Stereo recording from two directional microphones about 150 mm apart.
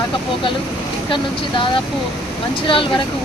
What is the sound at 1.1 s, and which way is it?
Speech, 35° left (ahead or behind).